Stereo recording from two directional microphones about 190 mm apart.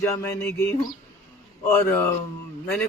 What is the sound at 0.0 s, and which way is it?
Speech, 15° left (ahead or behind).